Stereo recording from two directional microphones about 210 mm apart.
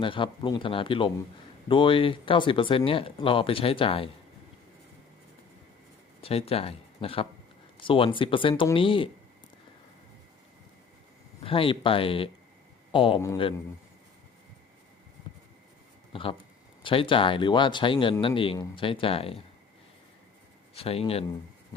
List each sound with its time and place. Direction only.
0.0 s speech: 25° left (ahead or behind)
6.2 s speech: 30° left (ahead or behind)
11.4 s a man's voice: 25° left (ahead or behind)
15.3 s a sound: 25° left (ahead or behind)
16.8 s speech: 25° left (ahead or behind)
20.7 s speech: 30° left (ahead or behind)